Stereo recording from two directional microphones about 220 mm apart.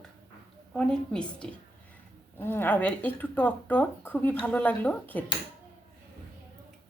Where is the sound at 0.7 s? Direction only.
5° left (ahead or behind).